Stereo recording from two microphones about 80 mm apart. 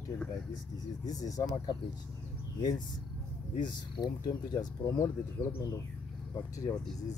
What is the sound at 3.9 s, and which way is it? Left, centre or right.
Speech, left.